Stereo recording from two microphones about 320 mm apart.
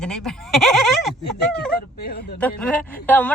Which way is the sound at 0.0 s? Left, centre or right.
Centre.